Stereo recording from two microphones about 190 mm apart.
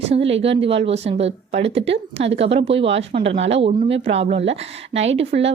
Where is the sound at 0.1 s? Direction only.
30° right (ahead or behind).